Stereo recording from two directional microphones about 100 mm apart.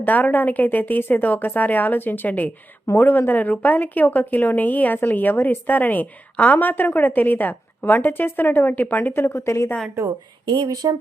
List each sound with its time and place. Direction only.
0.0 s a woman's voice: 15° left (ahead or behind)
10.5 s speech: 45° right (ahead or behind)